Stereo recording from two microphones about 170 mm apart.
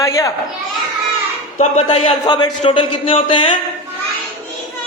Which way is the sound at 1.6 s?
40° left (ahead or behind).